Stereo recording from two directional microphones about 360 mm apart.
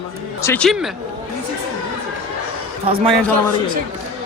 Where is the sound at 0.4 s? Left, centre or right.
Centre.